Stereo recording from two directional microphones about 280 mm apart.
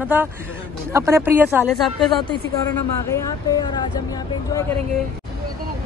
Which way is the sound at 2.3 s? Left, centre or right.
Centre.